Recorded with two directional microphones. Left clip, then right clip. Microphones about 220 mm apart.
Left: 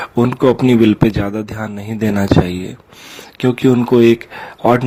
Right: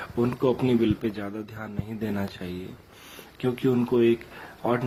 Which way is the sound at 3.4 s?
50° left (ahead or behind).